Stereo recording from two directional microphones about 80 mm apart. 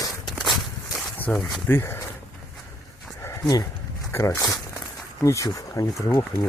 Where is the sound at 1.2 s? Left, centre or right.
Left.